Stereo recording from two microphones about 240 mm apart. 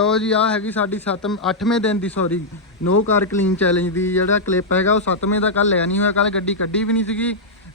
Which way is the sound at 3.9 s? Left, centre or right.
Centre.